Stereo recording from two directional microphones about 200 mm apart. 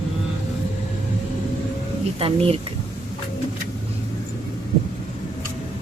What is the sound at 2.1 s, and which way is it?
Speech, 30° right (ahead or behind).